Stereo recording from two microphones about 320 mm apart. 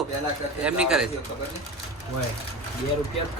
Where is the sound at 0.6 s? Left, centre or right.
Centre.